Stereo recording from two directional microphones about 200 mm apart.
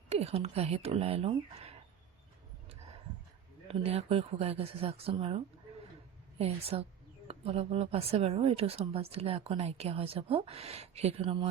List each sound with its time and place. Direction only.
0.1 s speech: 30° right (ahead or behind)
3.7 s speech: 30° right (ahead or behind)
6.4 s speech: 30° right (ahead or behind)